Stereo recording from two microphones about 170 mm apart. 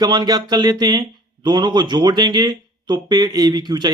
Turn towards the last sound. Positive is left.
turn(degrees=-25)  # may be behind; listen again after turning